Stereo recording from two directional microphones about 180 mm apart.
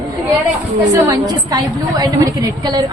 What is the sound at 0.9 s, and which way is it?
A woman's voice, 20° right (ahead or behind).